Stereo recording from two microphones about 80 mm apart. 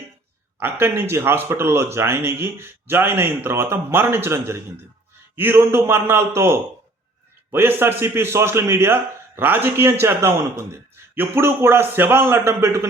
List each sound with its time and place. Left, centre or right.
0.6 s a man's voice: right